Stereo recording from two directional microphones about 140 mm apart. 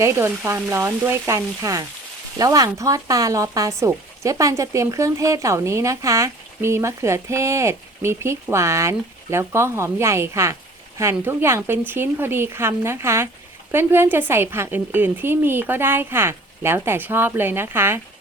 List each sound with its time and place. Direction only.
0.0 s a woman's voice: 20° right (ahead or behind)